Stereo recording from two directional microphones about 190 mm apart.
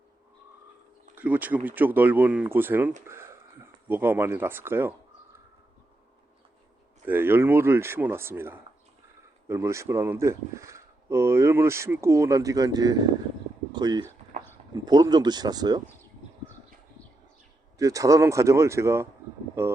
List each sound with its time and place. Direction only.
1.1 s speech: 10° right (ahead or behind)
3.1 s a sound: 15° right (ahead or behind)
3.8 s speech: 10° right (ahead or behind)
7.0 s speech: 10° right (ahead or behind)
17.7 s speech: 15° right (ahead or behind)